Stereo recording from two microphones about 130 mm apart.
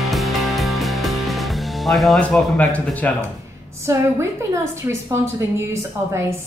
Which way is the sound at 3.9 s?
20° right (ahead or behind).